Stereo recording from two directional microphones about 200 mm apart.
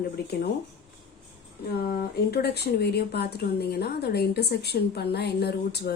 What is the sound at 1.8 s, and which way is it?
Speech, 50° left (ahead or behind).